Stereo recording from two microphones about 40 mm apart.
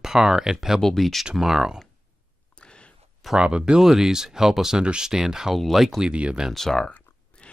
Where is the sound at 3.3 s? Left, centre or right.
Right.